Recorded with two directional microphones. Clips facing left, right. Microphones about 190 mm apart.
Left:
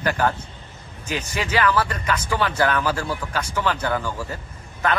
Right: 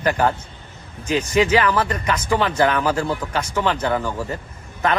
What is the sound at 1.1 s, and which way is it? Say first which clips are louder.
Speech: right 9 dB; 30° right (ahead or behind).